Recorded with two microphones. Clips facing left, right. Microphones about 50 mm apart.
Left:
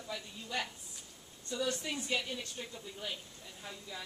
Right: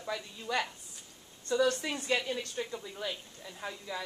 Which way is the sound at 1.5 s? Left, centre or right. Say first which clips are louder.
Right 8 dB; right.